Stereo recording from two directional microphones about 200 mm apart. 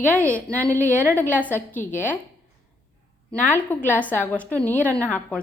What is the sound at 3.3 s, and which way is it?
A woman's voice, 10° left (ahead or behind).